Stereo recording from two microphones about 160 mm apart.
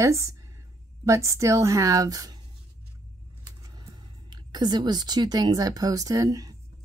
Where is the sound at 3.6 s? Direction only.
25° right (ahead or behind).